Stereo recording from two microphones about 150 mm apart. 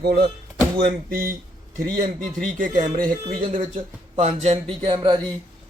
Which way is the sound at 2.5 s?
60° right (ahead or behind).